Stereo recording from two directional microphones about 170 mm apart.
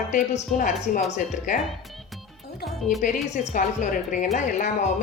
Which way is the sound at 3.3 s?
45° left (ahead or behind).